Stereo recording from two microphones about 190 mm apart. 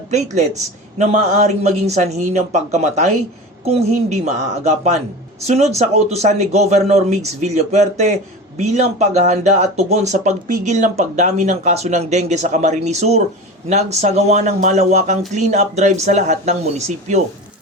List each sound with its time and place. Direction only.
0.1 s speech: 35° right (ahead or behind)